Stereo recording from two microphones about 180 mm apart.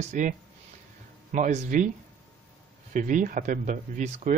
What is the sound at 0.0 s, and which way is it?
Speech, 45° right (ahead or behind).